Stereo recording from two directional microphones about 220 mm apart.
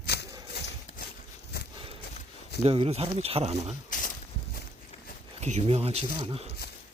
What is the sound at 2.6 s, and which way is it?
Speech, 25° right (ahead or behind).